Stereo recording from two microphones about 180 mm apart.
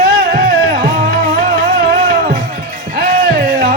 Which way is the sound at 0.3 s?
60° right (ahead or behind).